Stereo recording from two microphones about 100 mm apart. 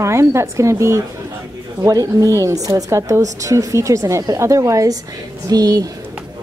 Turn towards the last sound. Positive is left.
turn(degrees=-40)  # may be behind; listen again after turning